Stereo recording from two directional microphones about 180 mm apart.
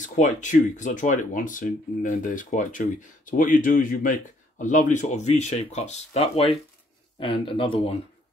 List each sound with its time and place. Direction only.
0.0 s speech: 45° left (ahead or behind)